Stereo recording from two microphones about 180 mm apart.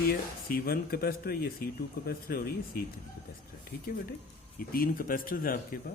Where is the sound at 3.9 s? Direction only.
55° left (ahead or behind).